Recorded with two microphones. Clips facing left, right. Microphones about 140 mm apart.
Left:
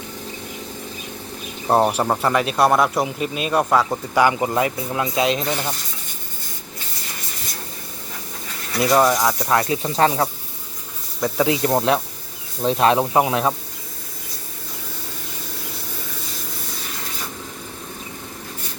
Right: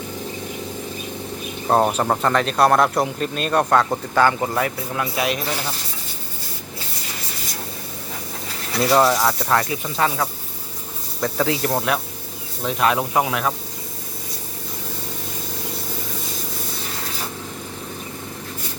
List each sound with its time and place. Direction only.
1.6 s speech: 10° left (ahead or behind)
8.8 s speech: centre (ahead or behind)
9.5 s speech: 25° left (ahead or behind)
11.4 s speech: 25° left (ahead or behind)